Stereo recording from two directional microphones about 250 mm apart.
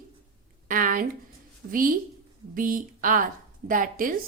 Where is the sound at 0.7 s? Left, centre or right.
Right.